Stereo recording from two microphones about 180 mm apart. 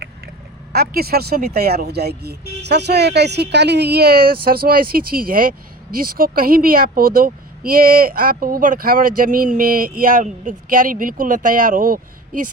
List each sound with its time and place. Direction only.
0.7 s speech: 60° right (ahead or behind)